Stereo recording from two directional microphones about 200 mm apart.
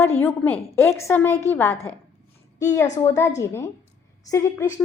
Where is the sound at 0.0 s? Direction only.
10° left (ahead or behind).